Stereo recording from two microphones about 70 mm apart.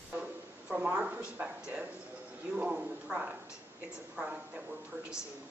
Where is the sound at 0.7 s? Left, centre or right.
Centre.